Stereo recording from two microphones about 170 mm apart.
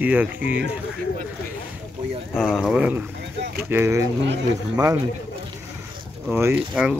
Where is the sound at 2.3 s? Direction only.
Centre (ahead or behind).